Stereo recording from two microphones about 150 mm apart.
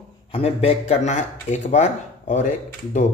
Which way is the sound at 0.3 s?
40° left (ahead or behind).